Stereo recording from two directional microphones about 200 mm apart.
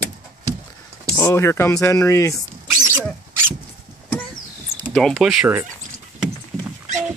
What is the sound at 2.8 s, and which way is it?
Roaring cats, 10° right (ahead or behind).